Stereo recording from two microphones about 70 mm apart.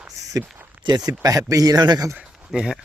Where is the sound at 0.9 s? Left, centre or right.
Right.